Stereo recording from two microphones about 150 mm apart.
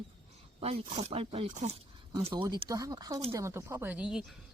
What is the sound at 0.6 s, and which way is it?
Speech, 45° right (ahead or behind).